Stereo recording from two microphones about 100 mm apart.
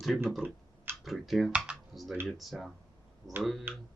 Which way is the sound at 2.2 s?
Centre (ahead or behind).